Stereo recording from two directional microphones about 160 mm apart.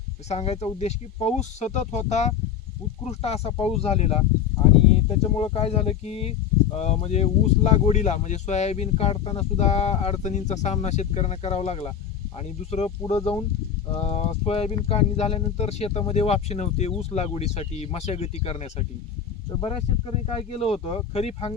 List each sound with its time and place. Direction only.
0.3 s speech: 40° left (ahead or behind)